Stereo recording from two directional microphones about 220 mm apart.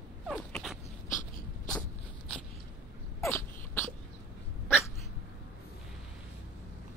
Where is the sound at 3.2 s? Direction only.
10° left (ahead or behind).